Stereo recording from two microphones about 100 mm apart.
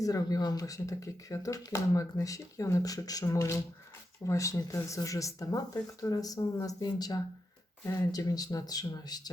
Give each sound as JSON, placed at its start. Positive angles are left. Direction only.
{"t": 0.0, "sound": "speech", "side_deg": 35}